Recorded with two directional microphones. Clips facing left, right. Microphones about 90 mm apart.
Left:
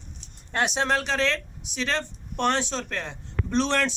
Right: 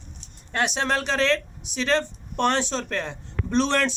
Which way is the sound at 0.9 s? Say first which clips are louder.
Right 2 dB; 5° left (ahead or behind).